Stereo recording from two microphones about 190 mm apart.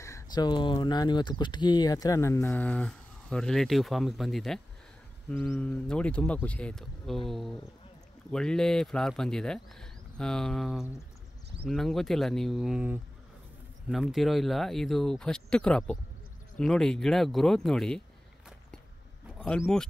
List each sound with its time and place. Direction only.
0.0 s speech: 20° left (ahead or behind); by 18.0 s 5° left (ahead or behind)
19.3 s speech: 5° left (ahead or behind)